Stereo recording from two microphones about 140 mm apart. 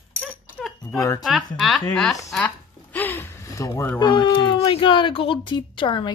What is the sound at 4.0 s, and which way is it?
A woman's voice, 35° left (ahead or behind).